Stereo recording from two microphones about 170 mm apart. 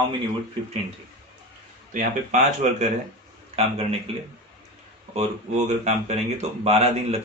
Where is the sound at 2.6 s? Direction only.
45° right (ahead or behind).